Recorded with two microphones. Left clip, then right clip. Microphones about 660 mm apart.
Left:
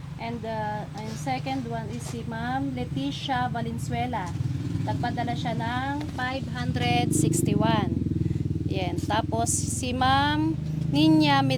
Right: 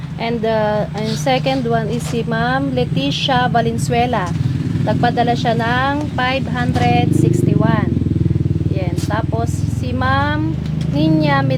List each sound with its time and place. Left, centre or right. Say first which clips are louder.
0.3 s speech: right 14 dB; right
6.8 s speech: right 8 dB; left
10.0 s speech: right 5 dB; left